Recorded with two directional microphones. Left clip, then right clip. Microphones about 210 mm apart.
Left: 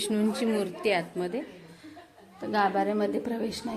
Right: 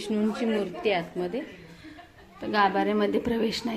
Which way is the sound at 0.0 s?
Centre (ahead or behind).